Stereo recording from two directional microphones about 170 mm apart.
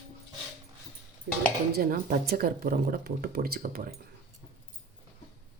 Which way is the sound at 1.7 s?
60° right (ahead or behind).